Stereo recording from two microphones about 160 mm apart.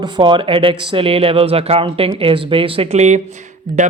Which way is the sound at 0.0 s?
30° right (ahead or behind).